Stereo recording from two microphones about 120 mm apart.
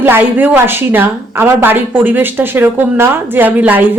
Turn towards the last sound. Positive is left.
turn(degrees=-15)  # may be behind; listen again after turning